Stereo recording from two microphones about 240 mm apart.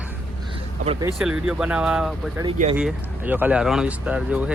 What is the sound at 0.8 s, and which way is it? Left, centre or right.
Speech, right.